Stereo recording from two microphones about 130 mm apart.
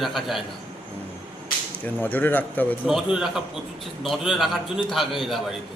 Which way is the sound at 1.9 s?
15° left (ahead or behind).